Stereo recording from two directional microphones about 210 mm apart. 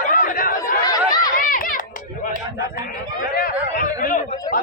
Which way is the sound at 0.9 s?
20° left (ahead or behind).